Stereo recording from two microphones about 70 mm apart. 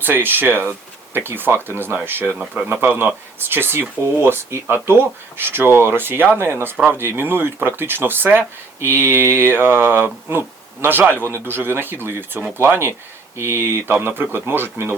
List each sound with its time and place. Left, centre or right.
0.0 s speech: right